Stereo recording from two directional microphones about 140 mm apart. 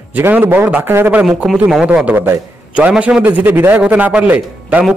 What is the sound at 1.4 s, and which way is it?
A man's voice, 5° right (ahead or behind).